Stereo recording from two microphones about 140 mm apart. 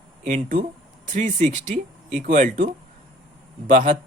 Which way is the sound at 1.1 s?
65° right (ahead or behind).